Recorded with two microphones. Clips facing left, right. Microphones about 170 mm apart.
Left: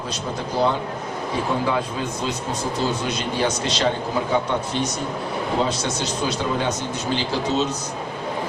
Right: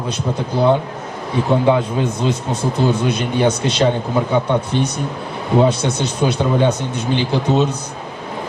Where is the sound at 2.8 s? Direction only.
60° right (ahead or behind).